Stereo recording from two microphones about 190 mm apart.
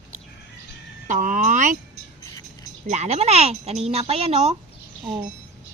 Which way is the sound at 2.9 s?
35° right (ahead or behind).